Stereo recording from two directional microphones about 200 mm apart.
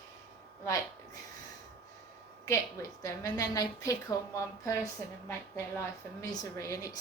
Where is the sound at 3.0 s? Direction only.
15° left (ahead or behind).